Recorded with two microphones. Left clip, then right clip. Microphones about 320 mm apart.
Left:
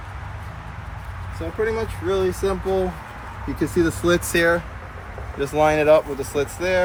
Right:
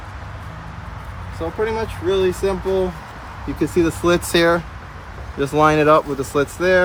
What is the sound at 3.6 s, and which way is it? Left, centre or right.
Speech, centre.